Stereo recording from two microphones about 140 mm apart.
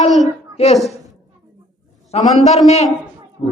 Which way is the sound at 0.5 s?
50° left (ahead or behind).